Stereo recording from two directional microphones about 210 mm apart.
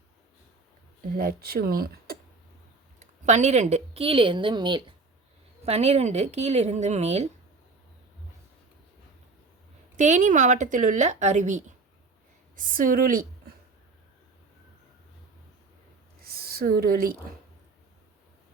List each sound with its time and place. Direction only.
1.1 s speech: 45° right (ahead or behind)
3.0 s a woman's voice: 35° right (ahead or behind)
10.0 s speech: 35° right (ahead or behind)
16.2 s a sound: 45° right (ahead or behind)